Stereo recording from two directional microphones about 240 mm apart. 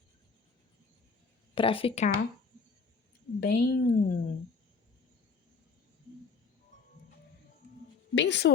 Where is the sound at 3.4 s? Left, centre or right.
Left.